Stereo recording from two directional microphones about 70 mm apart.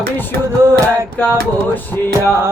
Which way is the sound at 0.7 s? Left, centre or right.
Right.